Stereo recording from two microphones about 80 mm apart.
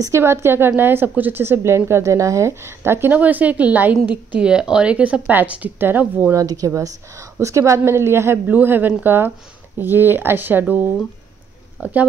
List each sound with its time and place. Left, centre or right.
0.0 s a woman's voice: right
6.3 s a woman's voice: right; by 11.9 s centre